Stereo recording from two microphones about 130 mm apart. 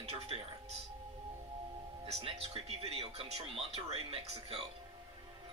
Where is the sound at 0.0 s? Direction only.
50° right (ahead or behind).